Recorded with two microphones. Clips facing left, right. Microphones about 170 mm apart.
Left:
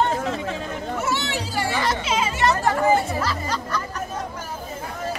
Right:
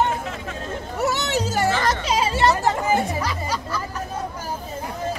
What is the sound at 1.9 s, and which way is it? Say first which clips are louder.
Music: right 2 dB; 35° right (ahead or behind).